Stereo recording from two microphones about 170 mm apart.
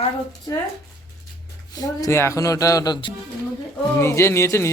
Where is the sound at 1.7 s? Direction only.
20° left (ahead or behind).